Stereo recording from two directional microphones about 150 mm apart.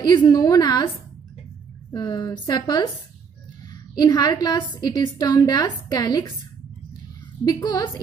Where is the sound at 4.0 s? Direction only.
25° left (ahead or behind).